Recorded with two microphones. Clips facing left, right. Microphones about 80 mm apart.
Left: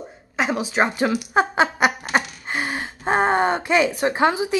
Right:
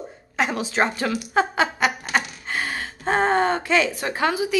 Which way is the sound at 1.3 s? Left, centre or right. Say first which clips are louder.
Even; left.